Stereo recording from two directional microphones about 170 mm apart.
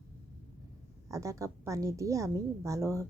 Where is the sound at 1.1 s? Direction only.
20° right (ahead or behind).